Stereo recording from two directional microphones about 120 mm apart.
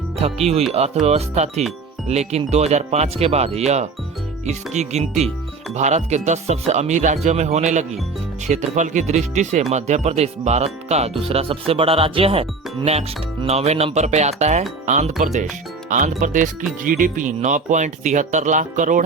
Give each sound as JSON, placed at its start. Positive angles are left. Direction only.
{"t": 0.2, "sound": "speech", "side_deg": -60}
{"t": 14.8, "sound": "speech", "side_deg": -85}
{"t": 15.9, "sound": "speech", "side_deg": -90}